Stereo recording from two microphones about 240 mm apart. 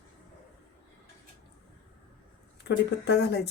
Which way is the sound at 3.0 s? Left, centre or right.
Left.